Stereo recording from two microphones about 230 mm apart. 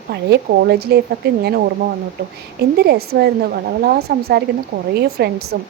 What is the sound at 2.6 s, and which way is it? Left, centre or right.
A woman's voice, right.